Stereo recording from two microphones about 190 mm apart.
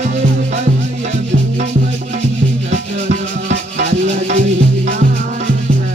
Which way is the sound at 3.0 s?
35° right (ahead or behind).